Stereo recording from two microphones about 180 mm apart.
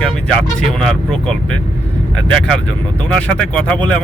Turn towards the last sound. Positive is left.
turn(degrees=5)  # may be behind; listen again after turning